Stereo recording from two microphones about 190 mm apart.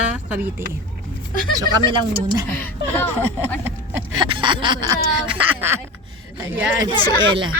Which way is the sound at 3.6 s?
10° right (ahead or behind).